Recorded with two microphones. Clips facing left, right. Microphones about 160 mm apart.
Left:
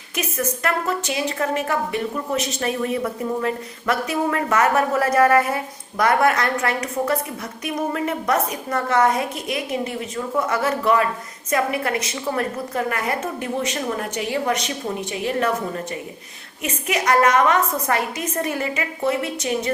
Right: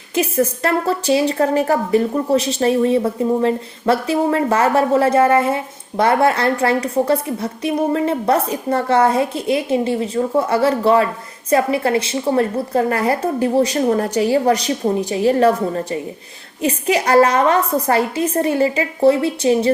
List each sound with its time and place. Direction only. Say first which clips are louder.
0.1 s a woman's voice: right 8 dB; 30° right (ahead or behind)